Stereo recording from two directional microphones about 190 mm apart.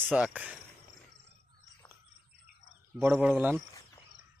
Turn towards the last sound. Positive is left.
turn(degrees=-10)  # may be behind; listen again after turning